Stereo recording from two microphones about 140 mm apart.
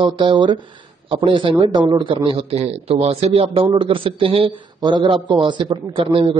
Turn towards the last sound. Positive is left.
turn(degrees=-40)  # may be behind; listen again after turning